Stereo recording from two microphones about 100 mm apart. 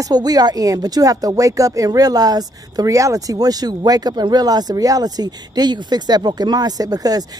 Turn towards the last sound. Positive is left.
turn(degrees=-40)  # may be behind; listen again after turning